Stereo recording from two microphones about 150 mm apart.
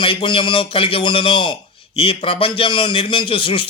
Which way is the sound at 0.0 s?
35° left (ahead or behind).